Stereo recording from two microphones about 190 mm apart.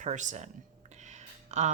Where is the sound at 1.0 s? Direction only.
40° right (ahead or behind).